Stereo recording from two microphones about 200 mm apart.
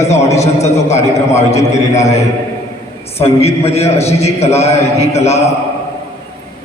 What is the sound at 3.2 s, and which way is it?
A man's voice, 30° left (ahead or behind).